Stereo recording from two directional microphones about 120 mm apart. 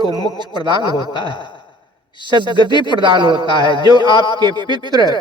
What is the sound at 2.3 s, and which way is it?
Speech, 40° left (ahead or behind).